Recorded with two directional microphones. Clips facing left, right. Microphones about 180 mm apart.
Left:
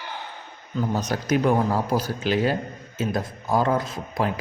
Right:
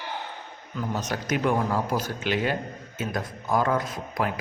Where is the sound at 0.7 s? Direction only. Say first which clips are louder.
Left 4 dB; 35° left (ahead or behind).